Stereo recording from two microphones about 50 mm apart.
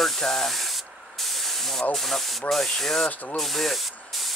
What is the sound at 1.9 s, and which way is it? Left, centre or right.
Speech, centre.